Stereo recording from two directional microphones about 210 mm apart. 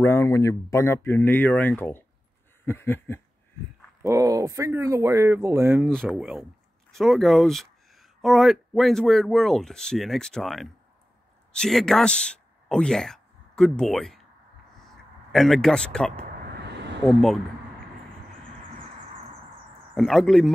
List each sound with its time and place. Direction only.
0.0 s speech: 10° left (ahead or behind)
4.0 s speech: 15° right (ahead or behind)
5.9 s speech: centre (ahead or behind)
15.3 s speech: centre (ahead or behind)
16.5 s a sound: 55° right (ahead or behind)
17.0 s speech: centre (ahead or behind)
19.9 s speech: centre (ahead or behind)